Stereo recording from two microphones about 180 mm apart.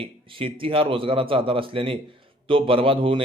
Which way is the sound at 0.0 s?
30° right (ahead or behind).